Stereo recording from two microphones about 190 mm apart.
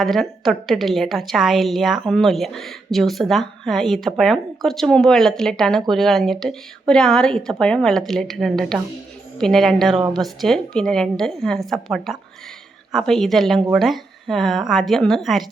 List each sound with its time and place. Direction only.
0.0 s speech: centre (ahead or behind)
9.9 s a woman's voice: 25° right (ahead or behind)
10.2 s speech: centre (ahead or behind)